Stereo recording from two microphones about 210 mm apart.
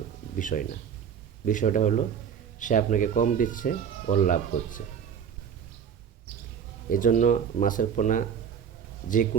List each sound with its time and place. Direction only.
0.3 s speech: 40° left (ahead or behind)
6.8 s speech: 40° left (ahead or behind)